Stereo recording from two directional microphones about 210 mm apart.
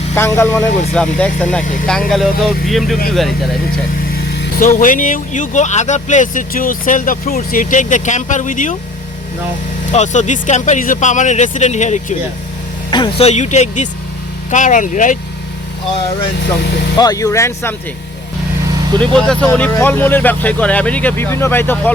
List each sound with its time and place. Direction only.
0.1 s speech: 10° left (ahead or behind)
4.1 s speech: 50° left (ahead or behind)
9.9 s speech: 35° left (ahead or behind)
17.0 s speech: 15° left (ahead or behind)
18.9 s speech: 5° left (ahead or behind)